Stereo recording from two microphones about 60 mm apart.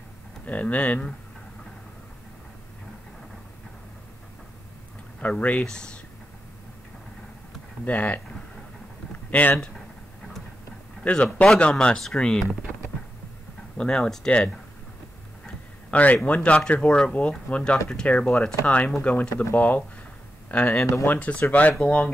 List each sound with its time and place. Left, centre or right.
0.5 s speech: left
5.2 s speech: left
7.8 s speech: left
9.3 s speech: left
11.1 s speech: centre
13.7 s speech: centre
15.9 s a man's voice: left